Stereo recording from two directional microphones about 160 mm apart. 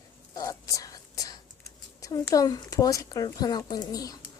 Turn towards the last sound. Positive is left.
turn(degrees=25)  # may be behind; listen again after turning